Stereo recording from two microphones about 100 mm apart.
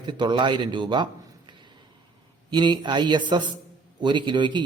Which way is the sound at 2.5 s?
50° right (ahead or behind).